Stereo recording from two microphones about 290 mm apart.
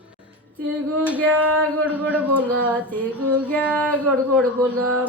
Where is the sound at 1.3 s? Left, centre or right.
Right.